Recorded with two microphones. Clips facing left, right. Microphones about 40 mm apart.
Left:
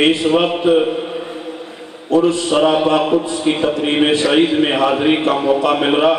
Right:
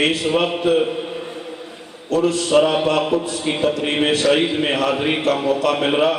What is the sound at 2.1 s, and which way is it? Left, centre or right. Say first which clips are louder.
A man's voice: left 2 dB; left.